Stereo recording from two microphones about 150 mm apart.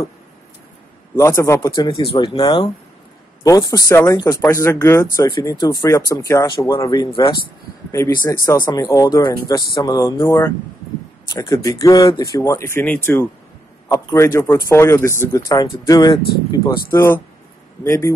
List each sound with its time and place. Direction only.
1.1 s speech: 20° left (ahead or behind)
1.8 s speech: 30° left (ahead or behind)
16.9 s speech: 15° left (ahead or behind)